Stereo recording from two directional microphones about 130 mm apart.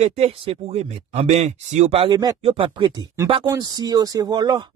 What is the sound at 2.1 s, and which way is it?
Speech, 30° right (ahead or behind).